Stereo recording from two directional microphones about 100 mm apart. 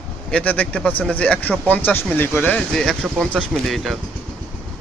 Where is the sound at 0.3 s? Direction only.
15° left (ahead or behind).